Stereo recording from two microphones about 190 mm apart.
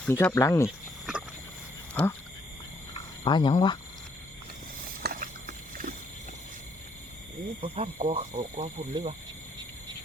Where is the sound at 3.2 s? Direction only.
25° left (ahead or behind).